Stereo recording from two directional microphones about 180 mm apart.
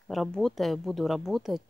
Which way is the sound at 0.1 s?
Centre (ahead or behind).